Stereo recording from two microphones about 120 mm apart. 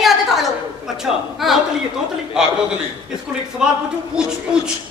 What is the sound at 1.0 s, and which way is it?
Speech, centre (ahead or behind).